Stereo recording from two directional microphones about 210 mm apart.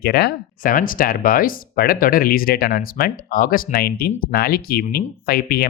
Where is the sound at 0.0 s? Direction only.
50° left (ahead or behind).